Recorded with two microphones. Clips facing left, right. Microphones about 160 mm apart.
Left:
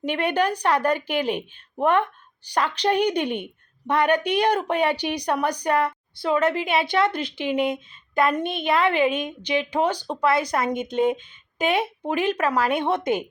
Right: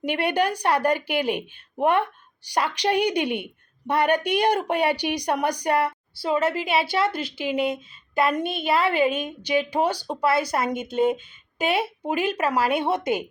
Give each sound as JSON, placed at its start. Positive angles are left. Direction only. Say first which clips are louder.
{"t": 0.0, "sound": "a woman's voice", "louder": "even", "side_deg": -10}
{"t": 8.7, "sound": "a woman's voice", "louder": "left 1 dB", "side_deg": -35}
{"t": 9.4, "sound": "a woman's voice", "louder": "right 1 dB", "side_deg": -10}